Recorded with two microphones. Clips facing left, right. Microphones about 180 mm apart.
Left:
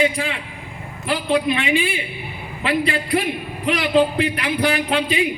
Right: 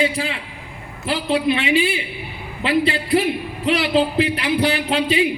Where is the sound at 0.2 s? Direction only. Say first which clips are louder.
Even; 30° right (ahead or behind).